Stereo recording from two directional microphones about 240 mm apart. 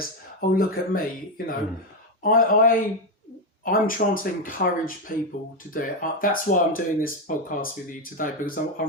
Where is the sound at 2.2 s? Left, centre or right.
Left.